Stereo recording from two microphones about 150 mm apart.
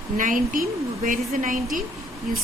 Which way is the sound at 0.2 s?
65° right (ahead or behind).